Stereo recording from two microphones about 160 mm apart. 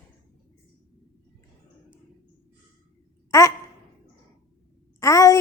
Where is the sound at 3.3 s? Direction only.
20° left (ahead or behind).